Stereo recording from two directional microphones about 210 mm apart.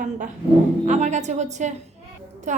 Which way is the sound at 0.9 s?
35° right (ahead or behind).